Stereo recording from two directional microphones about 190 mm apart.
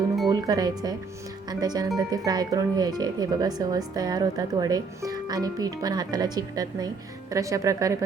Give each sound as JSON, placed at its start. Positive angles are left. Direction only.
{"t": 0.3, "sound": "speech", "side_deg": -20}